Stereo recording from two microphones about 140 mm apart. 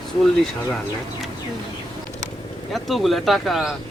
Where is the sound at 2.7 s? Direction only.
Centre (ahead or behind).